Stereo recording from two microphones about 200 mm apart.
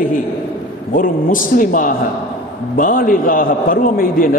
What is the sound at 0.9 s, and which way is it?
A man's voice, 45° left (ahead or behind).